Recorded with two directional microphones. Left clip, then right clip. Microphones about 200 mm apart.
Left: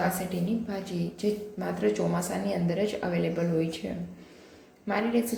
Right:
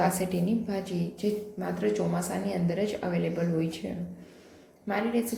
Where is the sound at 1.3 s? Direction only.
Centre (ahead or behind).